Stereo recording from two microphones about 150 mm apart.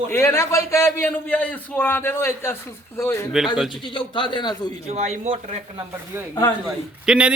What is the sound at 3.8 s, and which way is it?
Speech, 35° left (ahead or behind).